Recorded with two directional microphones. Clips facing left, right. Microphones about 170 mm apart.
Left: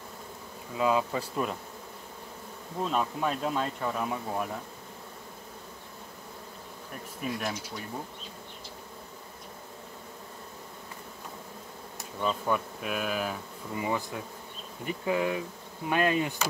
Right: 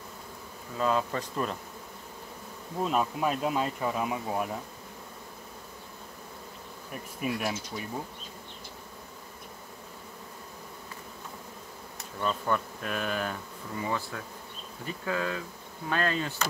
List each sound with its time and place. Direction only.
0.7 s speech: 10° left (ahead or behind)
2.8 s speech: 5° right (ahead or behind)
7.2 s speech: 5° right (ahead or behind)
12.2 s speech: 5° left (ahead or behind)
14.9 s bee: 20° left (ahead or behind)
15.9 s speech: 15° left (ahead or behind)